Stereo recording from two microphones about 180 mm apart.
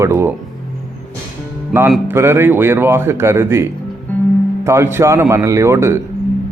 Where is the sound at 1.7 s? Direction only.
15° right (ahead or behind).